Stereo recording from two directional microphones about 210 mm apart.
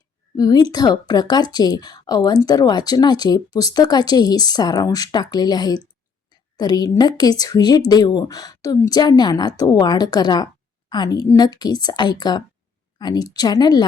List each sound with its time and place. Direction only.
0.3 s a woman's voice: 20° left (ahead or behind)